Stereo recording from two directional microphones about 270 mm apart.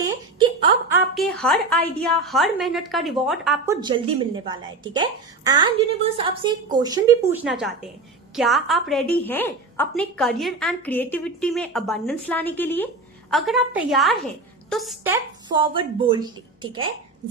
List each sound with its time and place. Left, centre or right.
0.9 s a woman's voice: centre
3.8 s a woman's voice: centre